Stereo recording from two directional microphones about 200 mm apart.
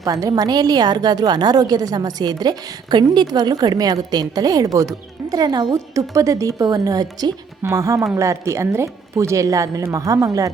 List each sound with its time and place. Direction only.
0.0 s a woman's voice: 15° right (ahead or behind)